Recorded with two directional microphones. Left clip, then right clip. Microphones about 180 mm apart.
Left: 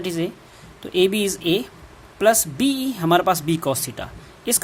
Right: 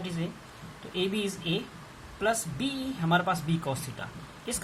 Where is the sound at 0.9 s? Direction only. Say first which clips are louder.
Left 12 dB; 70° left (ahead or behind).